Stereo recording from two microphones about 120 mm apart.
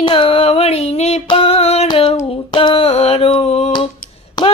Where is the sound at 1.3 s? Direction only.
55° left (ahead or behind).